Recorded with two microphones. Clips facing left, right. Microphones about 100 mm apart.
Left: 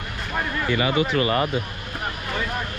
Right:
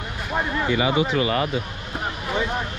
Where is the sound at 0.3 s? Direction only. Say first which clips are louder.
Right 2 dB; 15° right (ahead or behind).